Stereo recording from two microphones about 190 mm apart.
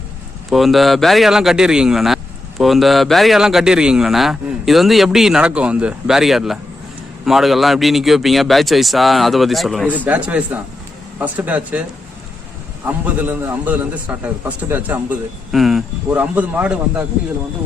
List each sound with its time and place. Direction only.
0.5 s a man's voice: centre (ahead or behind)